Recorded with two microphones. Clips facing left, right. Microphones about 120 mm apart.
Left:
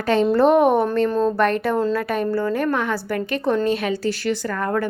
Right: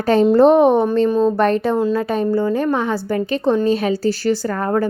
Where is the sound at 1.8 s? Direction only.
20° right (ahead or behind).